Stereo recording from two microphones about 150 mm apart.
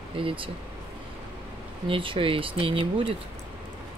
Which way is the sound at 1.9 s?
35° right (ahead or behind).